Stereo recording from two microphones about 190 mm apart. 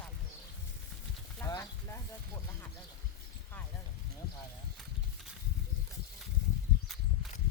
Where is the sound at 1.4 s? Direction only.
15° left (ahead or behind).